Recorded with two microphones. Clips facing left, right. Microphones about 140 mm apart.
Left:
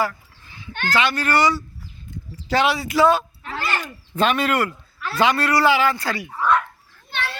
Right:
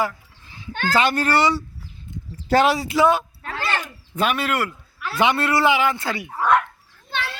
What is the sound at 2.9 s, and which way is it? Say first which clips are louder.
Speech: left 4 dB; 15° right (ahead or behind).